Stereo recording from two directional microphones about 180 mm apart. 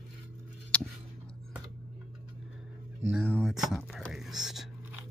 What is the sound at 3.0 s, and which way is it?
Whispering, 5° right (ahead or behind).